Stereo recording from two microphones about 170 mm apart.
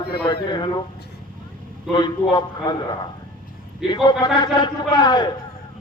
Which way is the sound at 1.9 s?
25° left (ahead or behind).